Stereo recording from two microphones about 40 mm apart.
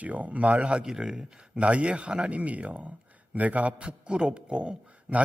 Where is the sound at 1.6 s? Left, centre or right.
Right.